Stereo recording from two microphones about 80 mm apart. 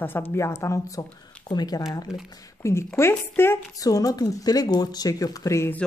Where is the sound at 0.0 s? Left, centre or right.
Left.